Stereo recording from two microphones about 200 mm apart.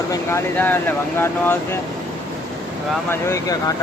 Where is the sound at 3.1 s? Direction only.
15° left (ahead or behind).